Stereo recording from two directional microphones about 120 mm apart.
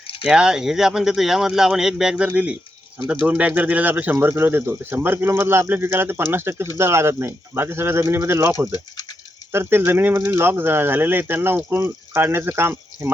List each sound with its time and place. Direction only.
0.3 s speech: 5° right (ahead or behind)